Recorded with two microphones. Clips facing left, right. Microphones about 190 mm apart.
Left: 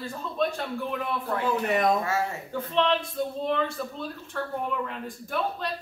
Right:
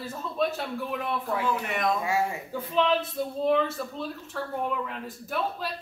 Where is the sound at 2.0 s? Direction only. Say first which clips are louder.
Right 1 dB; 15° right (ahead or behind).